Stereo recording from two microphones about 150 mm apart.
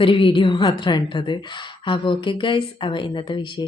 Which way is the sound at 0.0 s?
35° left (ahead or behind).